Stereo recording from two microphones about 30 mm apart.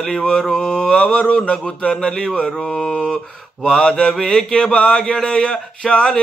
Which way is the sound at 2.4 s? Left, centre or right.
Centre.